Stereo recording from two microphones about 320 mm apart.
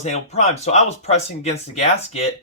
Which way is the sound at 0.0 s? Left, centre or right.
Centre.